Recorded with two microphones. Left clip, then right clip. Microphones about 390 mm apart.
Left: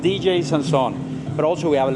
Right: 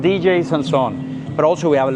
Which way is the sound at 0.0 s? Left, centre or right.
Right.